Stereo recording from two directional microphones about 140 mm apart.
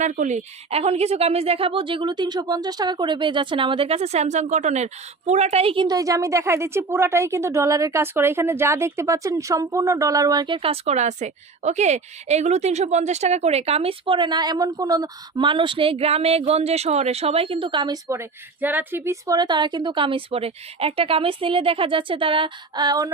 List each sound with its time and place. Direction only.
0.0 s a woman's voice: 65° right (ahead or behind); by 23.1 s 25° right (ahead or behind)